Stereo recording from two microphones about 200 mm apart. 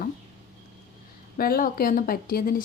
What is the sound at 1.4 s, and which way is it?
A woman's voice, 45° left (ahead or behind).